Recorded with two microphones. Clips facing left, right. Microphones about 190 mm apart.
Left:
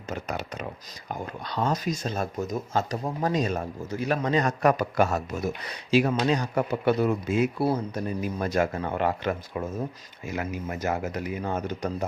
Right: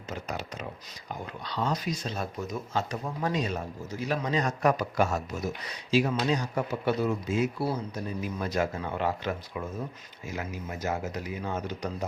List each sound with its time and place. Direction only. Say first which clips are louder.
0.1 s speech: left 3 dB; 55° left (ahead or behind)
1.0 s speech: left 4 dB; 45° left (ahead or behind)